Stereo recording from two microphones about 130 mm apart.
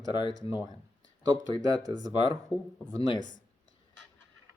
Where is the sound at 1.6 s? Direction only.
30° right (ahead or behind).